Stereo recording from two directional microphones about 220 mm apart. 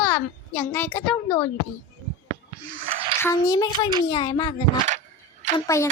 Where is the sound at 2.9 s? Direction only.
30° right (ahead or behind).